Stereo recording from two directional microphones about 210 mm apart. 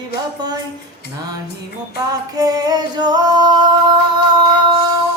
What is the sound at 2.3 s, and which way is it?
Singing, 20° right (ahead or behind).